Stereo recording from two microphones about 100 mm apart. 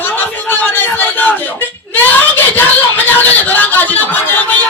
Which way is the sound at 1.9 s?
20° left (ahead or behind).